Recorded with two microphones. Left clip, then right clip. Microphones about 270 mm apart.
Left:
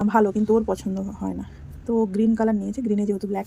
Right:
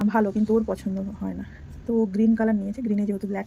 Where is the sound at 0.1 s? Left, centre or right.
Left.